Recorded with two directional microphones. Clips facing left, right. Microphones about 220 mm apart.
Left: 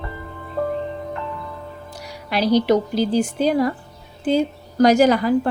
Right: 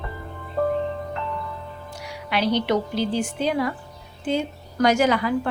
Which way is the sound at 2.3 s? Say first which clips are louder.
Left 5 dB; 40° left (ahead or behind).